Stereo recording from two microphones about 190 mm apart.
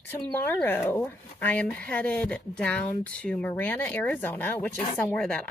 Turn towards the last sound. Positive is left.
turn(degrees=5)  # may be behind; listen again after turning